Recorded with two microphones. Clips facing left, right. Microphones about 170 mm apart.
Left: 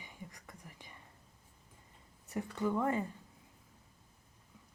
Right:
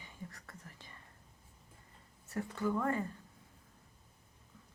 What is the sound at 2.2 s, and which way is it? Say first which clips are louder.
Speech: left 1 dB; 20° left (ahead or behind).